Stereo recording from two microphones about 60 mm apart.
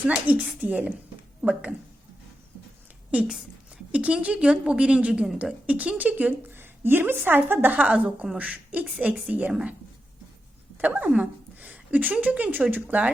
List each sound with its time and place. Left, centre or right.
0.3 s a woman's voice: right
3.1 s a woman's voice: centre; by 7.8 s right
7.8 s a woman's voice: centre
10.8 s a woman's voice: right